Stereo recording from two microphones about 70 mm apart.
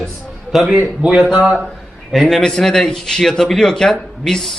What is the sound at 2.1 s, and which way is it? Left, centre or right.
A man's voice, centre.